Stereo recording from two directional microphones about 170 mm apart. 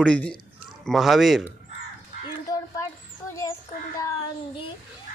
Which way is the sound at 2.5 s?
20° left (ahead or behind).